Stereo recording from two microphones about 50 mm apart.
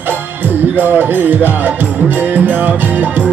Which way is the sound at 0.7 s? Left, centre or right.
Right.